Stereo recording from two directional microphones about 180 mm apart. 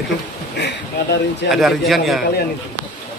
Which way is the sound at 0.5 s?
65° left (ahead or behind).